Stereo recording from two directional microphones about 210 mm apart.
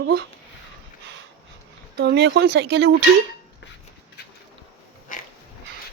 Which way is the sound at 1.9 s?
55° right (ahead or behind).